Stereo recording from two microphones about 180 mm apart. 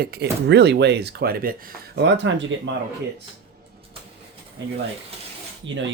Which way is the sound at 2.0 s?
80° right.